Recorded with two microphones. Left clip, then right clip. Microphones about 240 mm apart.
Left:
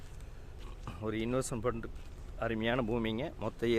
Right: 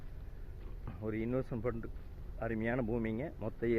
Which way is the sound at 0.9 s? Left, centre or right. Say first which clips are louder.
Left 3 dB; centre.